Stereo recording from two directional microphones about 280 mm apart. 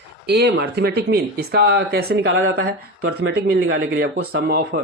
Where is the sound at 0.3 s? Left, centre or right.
Right.